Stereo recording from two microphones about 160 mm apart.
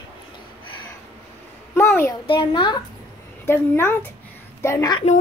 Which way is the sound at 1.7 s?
15° left (ahead or behind).